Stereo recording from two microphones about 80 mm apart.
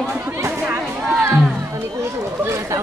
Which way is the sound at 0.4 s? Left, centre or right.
Right.